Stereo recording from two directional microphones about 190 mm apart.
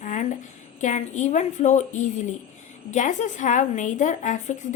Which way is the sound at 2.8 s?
40° left (ahead or behind).